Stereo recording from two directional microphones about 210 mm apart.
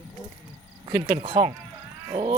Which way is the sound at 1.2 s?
25° right (ahead or behind).